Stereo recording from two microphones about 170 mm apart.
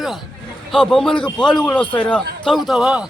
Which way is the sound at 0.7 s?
5° left (ahead or behind).